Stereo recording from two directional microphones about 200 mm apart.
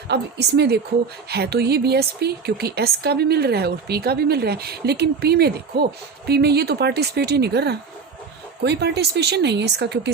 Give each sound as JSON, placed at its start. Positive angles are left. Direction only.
{"t": 0.1, "sound": "speech", "side_deg": -55}